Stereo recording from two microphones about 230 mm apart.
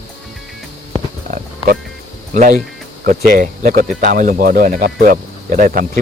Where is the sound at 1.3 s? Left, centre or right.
Right.